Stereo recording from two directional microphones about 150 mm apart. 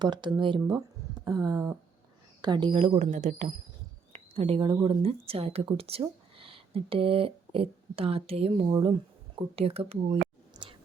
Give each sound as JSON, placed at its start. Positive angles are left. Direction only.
{"t": 0.0, "sound": "speech", "side_deg": -30}
{"t": 2.4, "sound": "speech", "side_deg": -30}
{"t": 4.1, "sound": "a woman's voice", "side_deg": -40}
{"t": 10.5, "sound": "a sound", "side_deg": -35}